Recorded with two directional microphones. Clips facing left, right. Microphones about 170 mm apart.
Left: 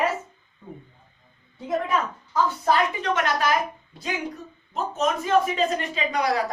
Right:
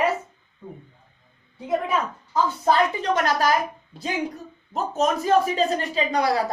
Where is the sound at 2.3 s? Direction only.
25° right (ahead or behind).